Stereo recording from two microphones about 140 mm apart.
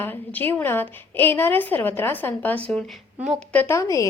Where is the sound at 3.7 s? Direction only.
25° left (ahead or behind).